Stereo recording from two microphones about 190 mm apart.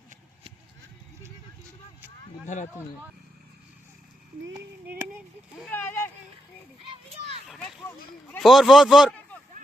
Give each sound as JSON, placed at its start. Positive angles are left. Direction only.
{"t": 5.7, "sound": "speech", "side_deg": 10}
{"t": 6.9, "sound": "a child's voice", "side_deg": -30}
{"t": 7.4, "sound": "speech", "side_deg": 0}
{"t": 7.9, "sound": "speech", "side_deg": 10}
{"t": 8.4, "sound": "a man's voice", "side_deg": 0}